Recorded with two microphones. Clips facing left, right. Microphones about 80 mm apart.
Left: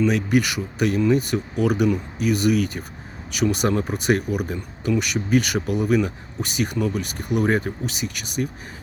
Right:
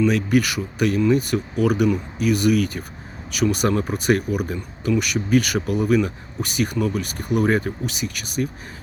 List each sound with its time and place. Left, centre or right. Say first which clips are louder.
0.0 s speech: right 1 dB; centre